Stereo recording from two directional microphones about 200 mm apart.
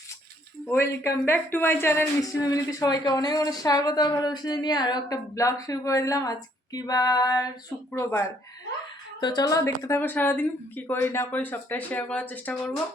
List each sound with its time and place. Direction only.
0.7 s a woman's voice: 10° left (ahead or behind)
6.7 s female singing: 20° left (ahead or behind)
9.2 s a woman's voice: 20° left (ahead or behind)